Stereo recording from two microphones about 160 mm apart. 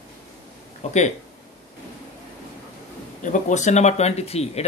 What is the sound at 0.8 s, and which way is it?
Speech, 45° left (ahead or behind).